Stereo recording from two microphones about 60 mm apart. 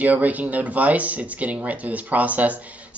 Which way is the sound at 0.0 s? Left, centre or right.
Right.